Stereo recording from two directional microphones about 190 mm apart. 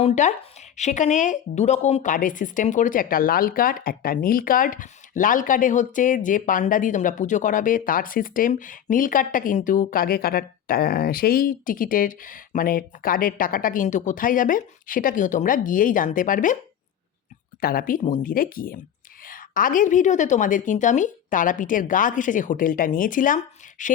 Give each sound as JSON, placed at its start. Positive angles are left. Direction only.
{"t": 0.0, "sound": "a woman's voice", "side_deg": 40}
{"t": 17.6, "sound": "a woman's voice", "side_deg": 50}